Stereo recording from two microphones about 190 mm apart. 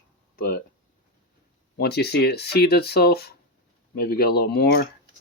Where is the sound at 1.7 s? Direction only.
55° left (ahead or behind).